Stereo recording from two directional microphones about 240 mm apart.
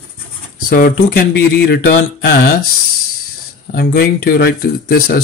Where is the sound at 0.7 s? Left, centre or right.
Left.